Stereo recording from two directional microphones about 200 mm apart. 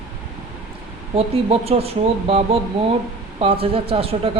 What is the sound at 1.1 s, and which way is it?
Speech, 30° right (ahead or behind).